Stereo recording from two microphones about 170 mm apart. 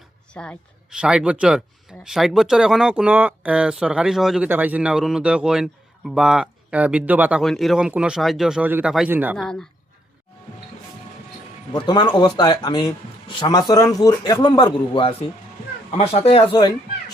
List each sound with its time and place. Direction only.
0.4 s speech: 10° left (ahead or behind)
0.9 s a man's voice: 5° right (ahead or behind)
9.4 s a man's voice: 5° left (ahead or behind)
11.7 s a man's voice: 25° left (ahead or behind)